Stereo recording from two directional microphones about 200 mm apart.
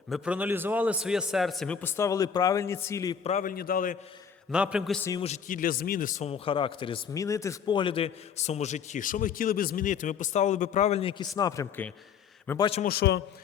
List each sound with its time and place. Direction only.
0.1 s a man's voice: 5° right (ahead or behind); by 3.2 s 15° left (ahead or behind)
3.2 s a man's voice: 40° left (ahead or behind)
4.5 s a man's voice: 5° right (ahead or behind)
5.2 s a man's voice: 40° left (ahead or behind); by 12.7 s 20° left (ahead or behind)
12.9 s a man's voice: 55° left (ahead or behind)